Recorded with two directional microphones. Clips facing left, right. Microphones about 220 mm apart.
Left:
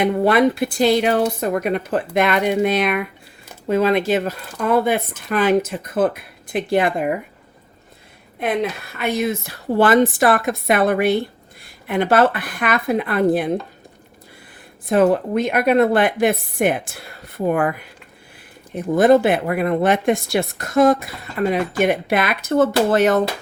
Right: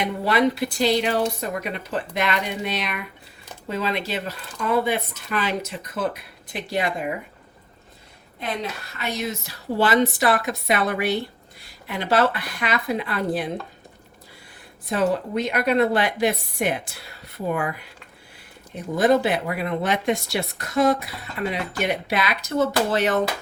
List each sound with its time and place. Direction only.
0.0 s speech: 50° left (ahead or behind)
9.0 s speech: 55° left (ahead or behind)
14.8 s speech: 55° left (ahead or behind)